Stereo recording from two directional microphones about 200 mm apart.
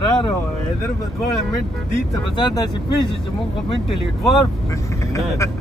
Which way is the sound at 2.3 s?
20° left (ahead or behind).